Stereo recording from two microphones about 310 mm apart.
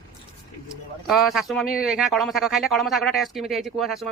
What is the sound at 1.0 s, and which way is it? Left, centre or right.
A man's voice, centre.